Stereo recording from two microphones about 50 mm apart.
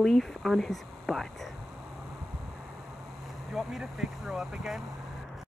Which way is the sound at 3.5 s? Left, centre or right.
Centre.